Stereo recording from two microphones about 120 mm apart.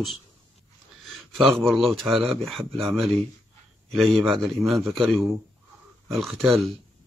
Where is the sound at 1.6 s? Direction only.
Centre (ahead or behind).